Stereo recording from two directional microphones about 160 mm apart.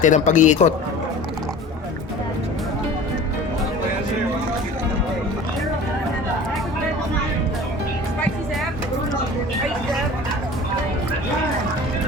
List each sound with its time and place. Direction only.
0.0 s a man's voice: 50° left (ahead or behind)